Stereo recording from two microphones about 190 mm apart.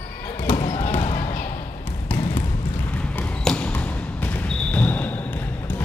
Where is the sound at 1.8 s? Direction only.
10° left (ahead or behind).